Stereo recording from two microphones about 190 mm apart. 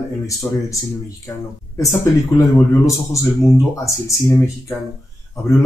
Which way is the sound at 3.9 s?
15° left (ahead or behind).